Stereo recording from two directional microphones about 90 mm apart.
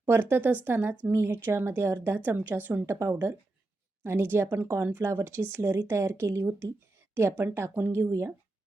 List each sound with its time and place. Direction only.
0.0 s a woman's voice: 25° right (ahead or behind)